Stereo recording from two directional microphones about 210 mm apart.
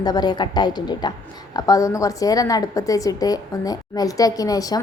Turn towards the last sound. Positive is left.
turn(degrees=15)  # may be behind; listen again after turning